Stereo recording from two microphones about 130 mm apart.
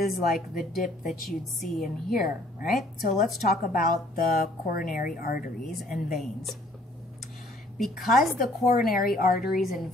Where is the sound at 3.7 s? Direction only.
90° left.